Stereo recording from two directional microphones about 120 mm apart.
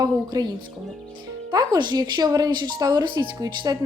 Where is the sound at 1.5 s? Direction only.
35° right (ahead or behind).